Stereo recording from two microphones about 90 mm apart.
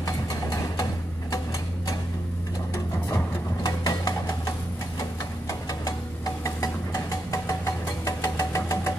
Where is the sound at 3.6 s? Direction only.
45° left (ahead or behind).